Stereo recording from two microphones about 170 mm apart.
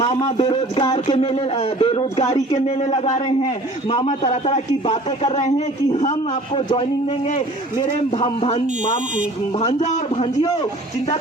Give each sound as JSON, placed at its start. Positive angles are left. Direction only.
{"t": 0.0, "sound": "speech", "side_deg": 30}
{"t": 3.8, "sound": "speech", "side_deg": 30}
{"t": 7.3, "sound": "speech", "side_deg": 45}